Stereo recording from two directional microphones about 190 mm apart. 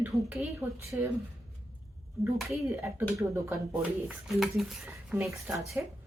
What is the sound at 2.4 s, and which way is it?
Speech, centre (ahead or behind).